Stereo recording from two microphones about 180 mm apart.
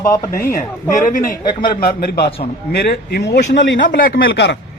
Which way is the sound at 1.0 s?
50° left (ahead or behind).